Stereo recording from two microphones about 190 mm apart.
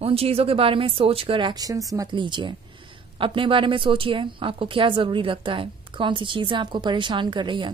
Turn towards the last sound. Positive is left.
turn(degrees=-25)  # may be behind; listen again after turning